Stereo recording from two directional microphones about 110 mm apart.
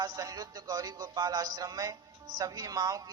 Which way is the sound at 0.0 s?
35° right (ahead or behind).